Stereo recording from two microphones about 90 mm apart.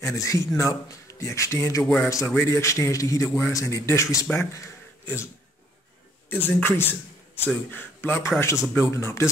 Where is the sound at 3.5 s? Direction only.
35° left (ahead or behind).